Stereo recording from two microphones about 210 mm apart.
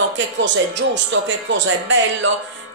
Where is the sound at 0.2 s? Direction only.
60° right (ahead or behind).